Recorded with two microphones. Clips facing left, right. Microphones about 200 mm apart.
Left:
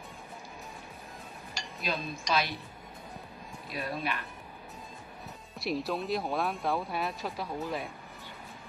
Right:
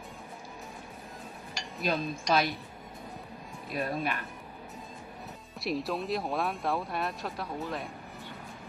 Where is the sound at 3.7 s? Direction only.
45° right (ahead or behind).